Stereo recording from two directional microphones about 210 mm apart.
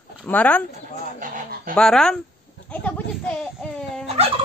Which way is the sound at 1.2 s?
40° right (ahead or behind).